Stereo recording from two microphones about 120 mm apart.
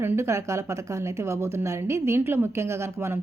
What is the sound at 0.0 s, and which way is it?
Speech, 20° right (ahead or behind).